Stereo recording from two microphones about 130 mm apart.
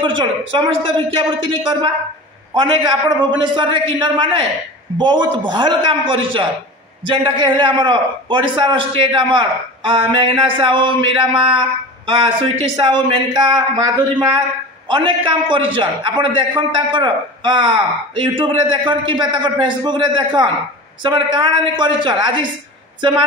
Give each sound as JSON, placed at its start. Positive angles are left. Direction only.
{"t": 0.0, "sound": "a man's voice", "side_deg": -40}